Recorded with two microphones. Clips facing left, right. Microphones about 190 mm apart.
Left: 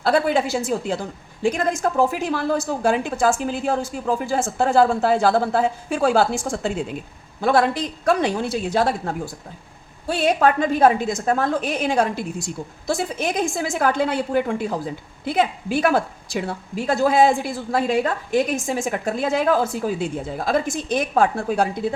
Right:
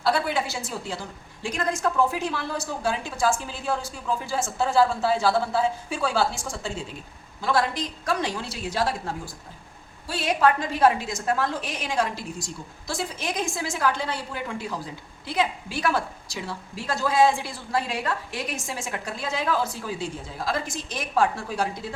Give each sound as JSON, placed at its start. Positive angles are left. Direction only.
{"t": 0.0, "sound": "a woman's voice", "side_deg": 50}